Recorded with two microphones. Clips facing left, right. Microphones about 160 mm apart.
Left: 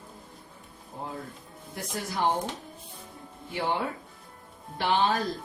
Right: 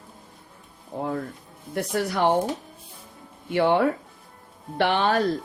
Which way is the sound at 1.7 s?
70° right (ahead or behind).